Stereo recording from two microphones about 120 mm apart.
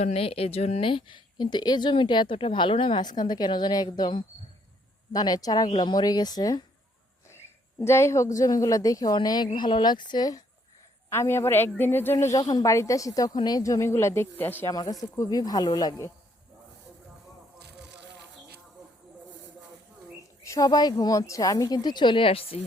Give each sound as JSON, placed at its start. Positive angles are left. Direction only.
{"t": 0.0, "sound": "speech", "side_deg": 55}
{"t": 7.8, "sound": "speech", "side_deg": 25}
{"t": 11.1, "sound": "speech", "side_deg": 20}
{"t": 12.1, "sound": "speech", "side_deg": 30}
{"t": 14.7, "sound": "speech", "side_deg": 30}
{"t": 20.4, "sound": "a woman's voice", "side_deg": 30}